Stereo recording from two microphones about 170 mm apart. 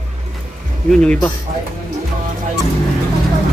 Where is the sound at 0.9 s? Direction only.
5° left (ahead or behind).